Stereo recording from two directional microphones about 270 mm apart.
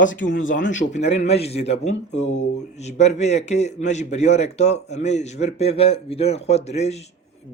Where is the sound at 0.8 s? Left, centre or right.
Left.